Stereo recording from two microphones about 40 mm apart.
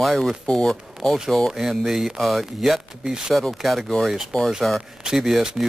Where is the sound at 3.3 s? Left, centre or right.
Centre.